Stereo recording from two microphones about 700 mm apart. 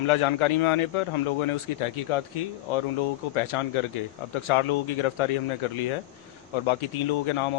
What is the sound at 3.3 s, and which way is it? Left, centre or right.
A man's voice, left.